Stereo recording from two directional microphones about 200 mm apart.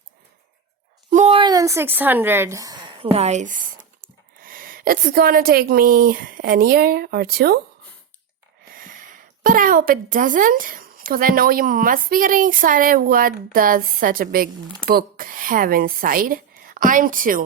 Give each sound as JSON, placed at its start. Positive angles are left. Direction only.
{"t": 1.1, "sound": "speech", "side_deg": -30}
{"t": 8.7, "sound": "a woman's voice", "side_deg": -45}